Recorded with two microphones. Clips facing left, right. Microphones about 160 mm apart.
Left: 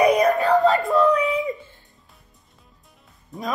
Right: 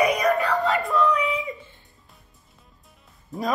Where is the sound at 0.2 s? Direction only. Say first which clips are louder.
Left 4 dB; 40° left (ahead or behind).